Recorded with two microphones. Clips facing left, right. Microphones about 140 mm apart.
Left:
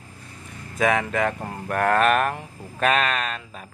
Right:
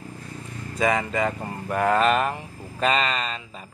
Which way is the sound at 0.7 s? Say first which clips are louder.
Left 1 dB; centre (ahead or behind).